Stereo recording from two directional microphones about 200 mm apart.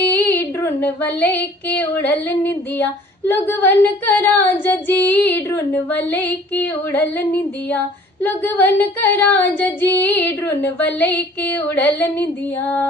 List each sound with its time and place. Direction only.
0.0 s female singing: 10° left (ahead or behind)